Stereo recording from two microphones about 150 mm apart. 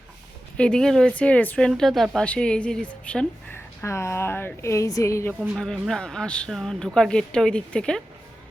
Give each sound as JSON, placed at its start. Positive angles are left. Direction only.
{"t": 0.5, "sound": "speech", "side_deg": 5}
{"t": 5.3, "sound": "speech", "side_deg": 0}